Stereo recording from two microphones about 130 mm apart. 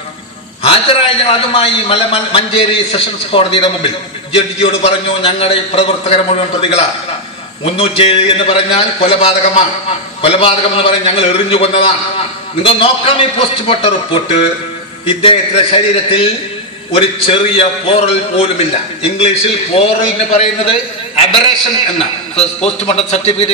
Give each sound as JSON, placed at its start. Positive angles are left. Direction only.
{"t": 0.7, "sound": "a man's voice", "side_deg": 45}
{"t": 22.6, "sound": "a man's voice", "side_deg": 55}